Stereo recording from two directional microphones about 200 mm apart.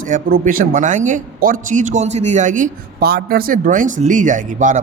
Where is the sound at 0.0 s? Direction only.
40° right (ahead or behind).